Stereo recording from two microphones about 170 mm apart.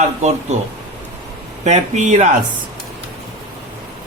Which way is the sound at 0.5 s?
40° right (ahead or behind).